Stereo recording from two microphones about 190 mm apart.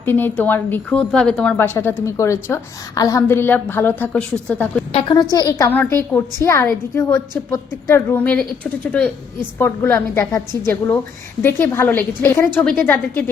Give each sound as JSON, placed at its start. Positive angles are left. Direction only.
{"t": 0.0, "sound": "a woman's voice", "side_deg": 10}
{"t": 4.9, "sound": "a woman's voice", "side_deg": 30}
{"t": 5.3, "sound": "a woman's voice", "side_deg": 20}